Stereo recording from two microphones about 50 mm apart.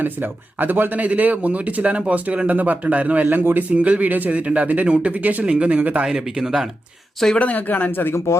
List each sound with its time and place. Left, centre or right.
0.0 s speech: right
3.2 s a man's voice: right
3.7 s speech: right
6.1 s speech: centre
7.3 s speech: left